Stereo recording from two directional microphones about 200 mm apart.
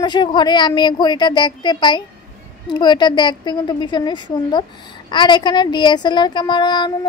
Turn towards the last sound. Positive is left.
turn(degrees=20)  # may be behind; listen again after turning